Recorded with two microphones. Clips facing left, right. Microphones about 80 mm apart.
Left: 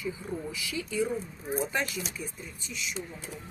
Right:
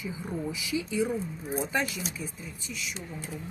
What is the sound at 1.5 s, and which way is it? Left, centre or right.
Speech, centre.